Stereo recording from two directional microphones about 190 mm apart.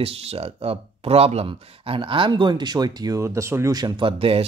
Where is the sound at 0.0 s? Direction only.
30° right (ahead or behind).